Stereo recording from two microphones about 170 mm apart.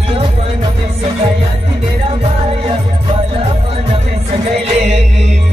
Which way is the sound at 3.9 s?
35° right (ahead or behind).